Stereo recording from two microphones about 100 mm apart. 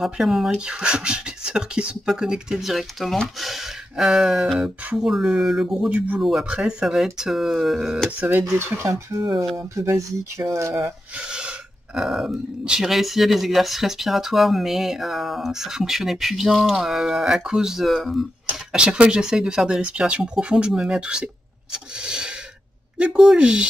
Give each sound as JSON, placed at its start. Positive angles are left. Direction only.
{"t": 0.0, "sound": "speech", "side_deg": 0}
{"t": 8.2, "sound": "speech", "side_deg": -15}
{"t": 8.5, "sound": "speech", "side_deg": -25}
{"t": 11.2, "sound": "speech", "side_deg": -10}
{"t": 22.0, "sound": "a sound", "side_deg": -10}
{"t": 22.9, "sound": "speech", "side_deg": -10}